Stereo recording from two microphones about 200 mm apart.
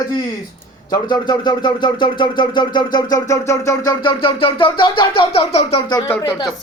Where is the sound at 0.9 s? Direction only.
20° left (ahead or behind).